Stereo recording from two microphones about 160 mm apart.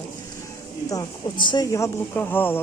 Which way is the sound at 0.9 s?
25° left (ahead or behind).